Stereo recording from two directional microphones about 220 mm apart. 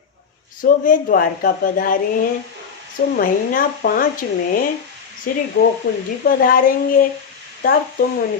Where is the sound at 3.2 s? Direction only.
40° left (ahead or behind).